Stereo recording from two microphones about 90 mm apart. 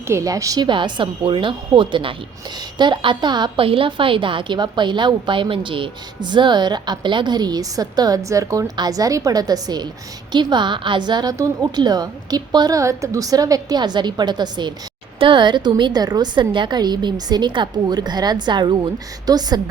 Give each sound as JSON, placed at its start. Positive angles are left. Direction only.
{"t": 0.1, "sound": "a woman's voice", "side_deg": -35}
{"t": 0.7, "sound": "a woman's voice", "side_deg": -60}
{"t": 3.6, "sound": "a woman's voice", "side_deg": -90}
{"t": 15.2, "sound": "a woman's voice", "side_deg": -60}
{"t": 19.2, "sound": "a woman's voice", "side_deg": -45}